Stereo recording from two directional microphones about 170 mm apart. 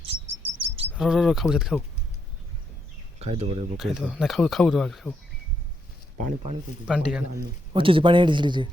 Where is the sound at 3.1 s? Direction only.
40° right (ahead or behind).